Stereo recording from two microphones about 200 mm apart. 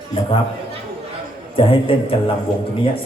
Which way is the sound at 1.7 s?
25° left (ahead or behind).